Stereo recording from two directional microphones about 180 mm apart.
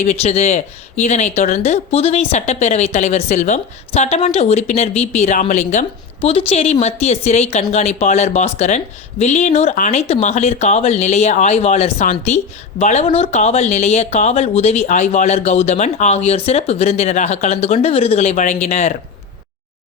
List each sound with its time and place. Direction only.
0.0 s speech: 40° left (ahead or behind)
6.1 s speech: 30° left (ahead or behind)